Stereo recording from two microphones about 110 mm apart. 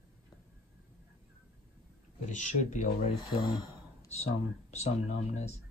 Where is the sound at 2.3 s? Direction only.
90° left.